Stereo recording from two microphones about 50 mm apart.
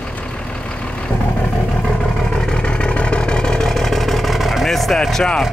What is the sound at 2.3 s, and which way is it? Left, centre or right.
Vehicle, left.